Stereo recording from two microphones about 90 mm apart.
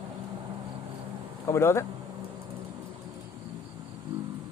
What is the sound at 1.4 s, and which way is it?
Speech, 30° left (ahead or behind).